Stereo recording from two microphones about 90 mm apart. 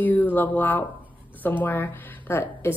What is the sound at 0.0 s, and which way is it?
A woman's voice, 20° left (ahead or behind).